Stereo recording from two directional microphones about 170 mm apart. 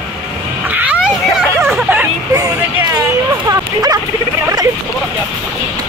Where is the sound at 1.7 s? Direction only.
10° right (ahead or behind).